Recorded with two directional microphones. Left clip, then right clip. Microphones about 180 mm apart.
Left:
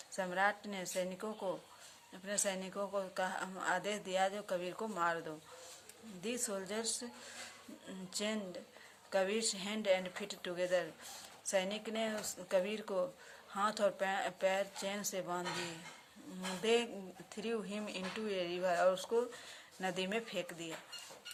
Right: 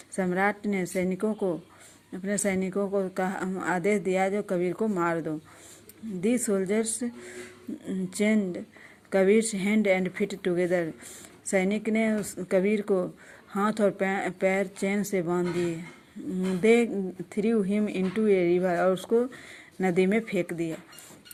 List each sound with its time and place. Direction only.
0.2 s speech: 30° right (ahead or behind)
16.6 s speech: 30° right (ahead or behind)